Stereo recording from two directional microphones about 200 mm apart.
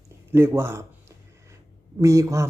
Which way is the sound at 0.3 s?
10° right (ahead or behind).